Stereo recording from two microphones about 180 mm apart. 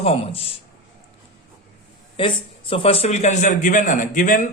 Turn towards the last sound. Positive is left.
turn(degrees=45)  # may be behind; listen again after turning